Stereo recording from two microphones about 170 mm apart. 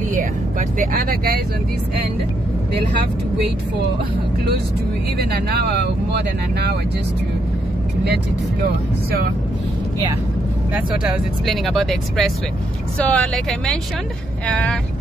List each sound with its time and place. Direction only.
0.1 s speech: 50° right (ahead or behind)
5.1 s speech: 75° right (ahead or behind)
10.7 s speech: 5° right (ahead or behind)